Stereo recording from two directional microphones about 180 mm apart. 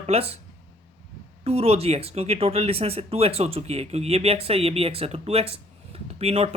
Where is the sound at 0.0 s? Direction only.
35° right (ahead or behind).